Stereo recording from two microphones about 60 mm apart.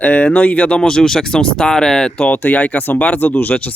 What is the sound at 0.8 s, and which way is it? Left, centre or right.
Speech, centre.